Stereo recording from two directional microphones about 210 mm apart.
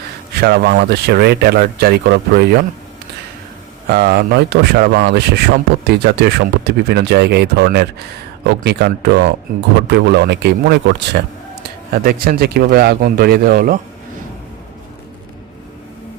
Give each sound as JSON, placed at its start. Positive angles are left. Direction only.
{"t": 0.3, "sound": "speech", "side_deg": -50}
{"t": 3.8, "sound": "speech", "side_deg": -50}